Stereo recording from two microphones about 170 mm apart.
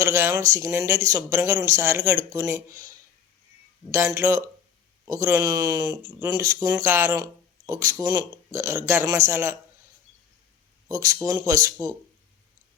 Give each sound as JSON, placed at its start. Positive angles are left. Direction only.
{"t": 0.0, "sound": "speech", "side_deg": -15}
{"t": 3.9, "sound": "speech", "side_deg": -15}
{"t": 10.8, "sound": "speech", "side_deg": -20}